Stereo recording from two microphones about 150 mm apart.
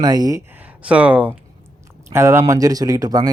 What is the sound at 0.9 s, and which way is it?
Speech, 10° right (ahead or behind).